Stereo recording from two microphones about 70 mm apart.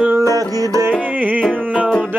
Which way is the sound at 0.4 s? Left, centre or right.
Right.